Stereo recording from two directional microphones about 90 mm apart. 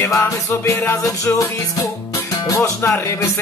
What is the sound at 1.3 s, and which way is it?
Speech, 40° left (ahead or behind).